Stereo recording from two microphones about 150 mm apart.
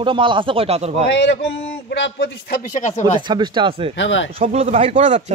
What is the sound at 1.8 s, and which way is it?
Speech, 90° left.